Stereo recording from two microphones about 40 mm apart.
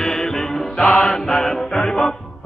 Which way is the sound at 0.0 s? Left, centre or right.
Centre.